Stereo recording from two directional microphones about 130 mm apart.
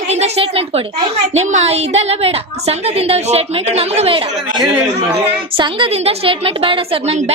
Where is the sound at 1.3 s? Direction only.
60° right (ahead or behind).